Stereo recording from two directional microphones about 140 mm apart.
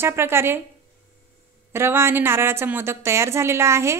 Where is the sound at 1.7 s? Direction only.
15° right (ahead or behind).